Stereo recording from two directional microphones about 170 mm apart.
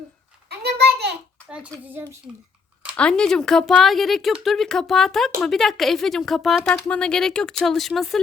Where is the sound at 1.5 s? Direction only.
5° right (ahead or behind).